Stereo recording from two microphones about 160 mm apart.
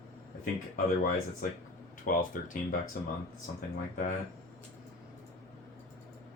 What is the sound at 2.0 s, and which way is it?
Speech, 60° left (ahead or behind).